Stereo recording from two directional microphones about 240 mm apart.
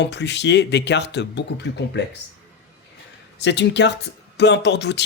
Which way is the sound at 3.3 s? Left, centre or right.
Left.